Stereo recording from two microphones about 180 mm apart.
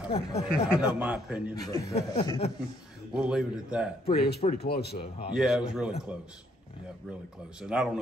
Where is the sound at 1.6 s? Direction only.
20° left (ahead or behind).